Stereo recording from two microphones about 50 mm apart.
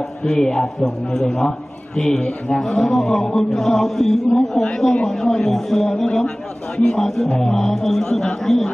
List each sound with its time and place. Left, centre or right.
0.2 s a man's voice: centre
3.5 s chant: centre
4.7 s a man's voice: centre